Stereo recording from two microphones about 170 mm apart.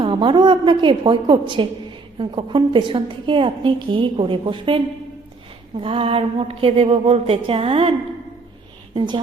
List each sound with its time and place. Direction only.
0.0 s a woman's voice: 30° right (ahead or behind)
9.0 s a woman's voice: 25° right (ahead or behind)